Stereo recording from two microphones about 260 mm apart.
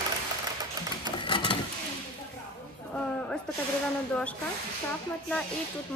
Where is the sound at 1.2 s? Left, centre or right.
Centre.